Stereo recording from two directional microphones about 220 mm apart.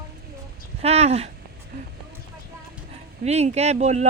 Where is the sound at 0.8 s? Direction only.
30° right (ahead or behind).